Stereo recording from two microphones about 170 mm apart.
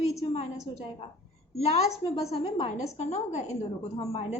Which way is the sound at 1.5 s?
40° left (ahead or behind).